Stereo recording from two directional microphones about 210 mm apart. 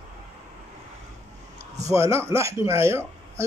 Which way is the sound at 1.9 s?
15° right (ahead or behind).